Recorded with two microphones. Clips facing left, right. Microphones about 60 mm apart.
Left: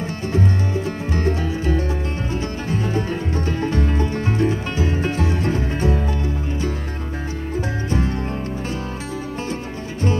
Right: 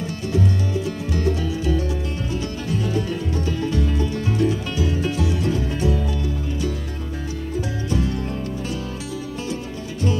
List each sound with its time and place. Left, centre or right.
0.3 s music: left